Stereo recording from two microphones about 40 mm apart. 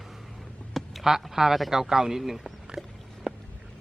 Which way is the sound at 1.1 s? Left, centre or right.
Centre.